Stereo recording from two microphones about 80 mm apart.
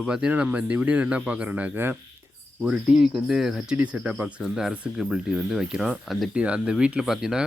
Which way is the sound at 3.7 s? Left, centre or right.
Centre.